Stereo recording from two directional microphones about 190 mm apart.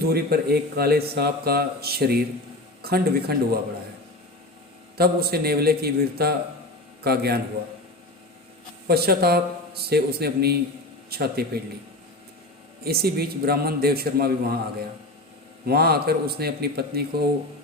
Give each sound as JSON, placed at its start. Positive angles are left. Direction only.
{"t": 0.0, "sound": "speech", "side_deg": -55}
{"t": 4.9, "sound": "speech", "side_deg": -55}
{"t": 8.9, "sound": "speech", "side_deg": -55}
{"t": 12.8, "sound": "a man's voice", "side_deg": -55}
{"t": 15.6, "sound": "speech", "side_deg": -55}